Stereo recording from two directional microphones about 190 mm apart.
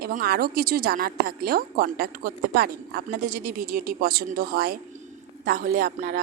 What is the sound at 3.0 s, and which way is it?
A woman's voice, 45° right (ahead or behind).